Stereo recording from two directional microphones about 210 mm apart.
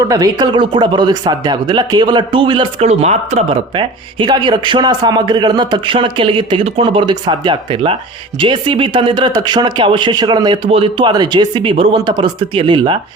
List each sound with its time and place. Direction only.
0.0 s speech: 15° right (ahead or behind)